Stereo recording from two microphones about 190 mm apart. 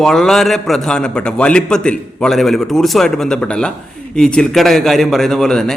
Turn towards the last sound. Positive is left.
turn(degrees=5)  # may be behind; listen again after turning